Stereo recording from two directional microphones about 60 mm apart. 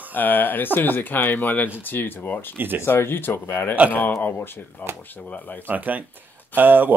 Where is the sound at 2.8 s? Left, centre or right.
Left.